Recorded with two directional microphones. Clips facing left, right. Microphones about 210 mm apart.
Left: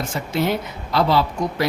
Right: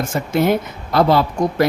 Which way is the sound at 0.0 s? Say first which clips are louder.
Right 5 dB; 50° right (ahead or behind).